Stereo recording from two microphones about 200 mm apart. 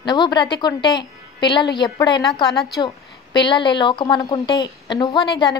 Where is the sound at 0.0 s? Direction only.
20° left (ahead or behind).